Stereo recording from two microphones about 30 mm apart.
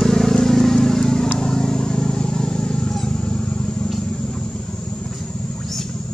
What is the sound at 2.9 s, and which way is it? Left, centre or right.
Vehicle, centre.